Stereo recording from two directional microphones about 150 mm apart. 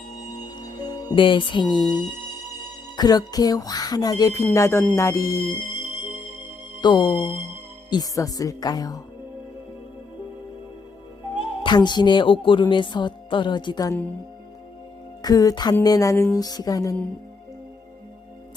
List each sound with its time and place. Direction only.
0.4 s music: 30° left (ahead or behind)
1.7 s speech: 30° left (ahead or behind)
6.8 s speech: 30° left (ahead or behind)
11.6 s speech: 30° left (ahead or behind)
15.2 s speech: 25° left (ahead or behind)